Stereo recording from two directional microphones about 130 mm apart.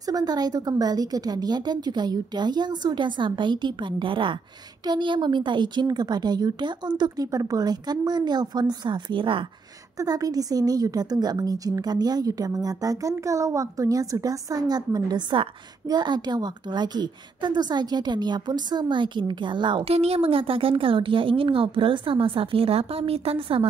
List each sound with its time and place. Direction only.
0.0 s a woman's voice: 30° right (ahead or behind)
9.9 s a woman's voice: 25° right (ahead or behind); by 23.7 s 45° right (ahead or behind)